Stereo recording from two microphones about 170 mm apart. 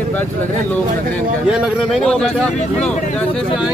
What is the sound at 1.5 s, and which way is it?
Speech, 5° left (ahead or behind).